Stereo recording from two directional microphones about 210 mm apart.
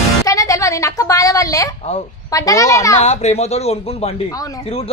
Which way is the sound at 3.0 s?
30° left (ahead or behind).